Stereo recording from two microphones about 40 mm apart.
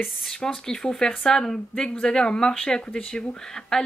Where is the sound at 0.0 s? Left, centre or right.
Centre.